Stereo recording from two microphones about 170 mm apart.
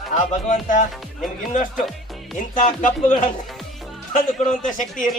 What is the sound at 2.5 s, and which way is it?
Speech, 50° left (ahead or behind).